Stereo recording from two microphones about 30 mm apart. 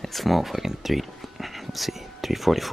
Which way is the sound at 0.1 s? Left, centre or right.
Centre.